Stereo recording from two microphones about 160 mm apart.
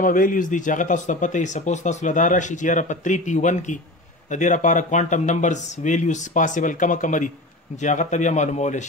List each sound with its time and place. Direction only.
0.0 s speech: 60° left (ahead or behind)